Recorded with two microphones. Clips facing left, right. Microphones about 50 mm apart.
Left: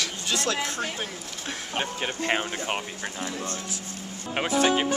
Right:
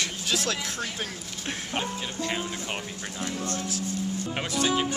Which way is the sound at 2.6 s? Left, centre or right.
Left.